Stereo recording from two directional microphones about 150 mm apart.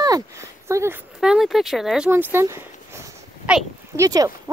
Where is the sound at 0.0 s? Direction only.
20° right (ahead or behind).